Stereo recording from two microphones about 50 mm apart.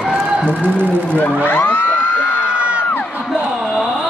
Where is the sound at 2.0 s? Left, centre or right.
Right.